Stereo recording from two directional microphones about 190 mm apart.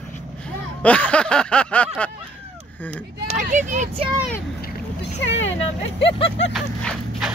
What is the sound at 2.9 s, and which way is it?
Speech, 40° right (ahead or behind).